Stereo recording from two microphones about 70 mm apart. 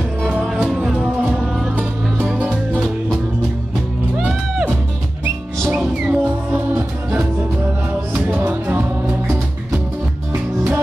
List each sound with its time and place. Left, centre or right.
0.2 s music: centre
1.8 s music: right
6.0 s music: right